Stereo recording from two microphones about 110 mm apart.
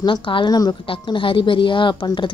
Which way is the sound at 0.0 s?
50° left (ahead or behind).